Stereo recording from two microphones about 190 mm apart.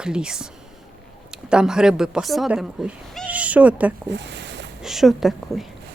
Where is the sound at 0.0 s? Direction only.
5° right (ahead or behind).